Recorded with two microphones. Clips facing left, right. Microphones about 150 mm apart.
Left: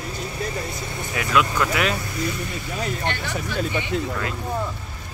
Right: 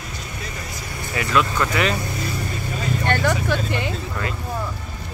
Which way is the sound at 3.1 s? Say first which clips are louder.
Right 7 dB; 55° right (ahead or behind).